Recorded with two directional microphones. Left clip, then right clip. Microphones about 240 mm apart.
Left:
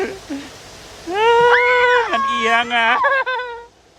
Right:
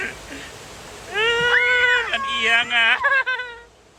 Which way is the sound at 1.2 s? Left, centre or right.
Left.